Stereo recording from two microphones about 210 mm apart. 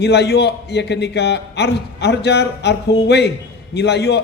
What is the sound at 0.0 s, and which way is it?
A man's voice, 55° left (ahead or behind).